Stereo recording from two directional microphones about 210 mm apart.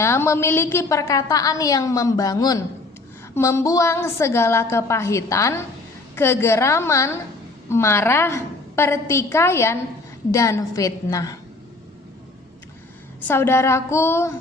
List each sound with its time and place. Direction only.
0.0 s a woman's voice: 15° left (ahead or behind)
13.2 s a woman's voice: 10° left (ahead or behind)